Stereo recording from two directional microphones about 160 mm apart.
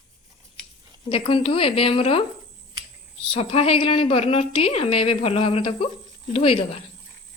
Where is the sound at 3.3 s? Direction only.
40° left (ahead or behind).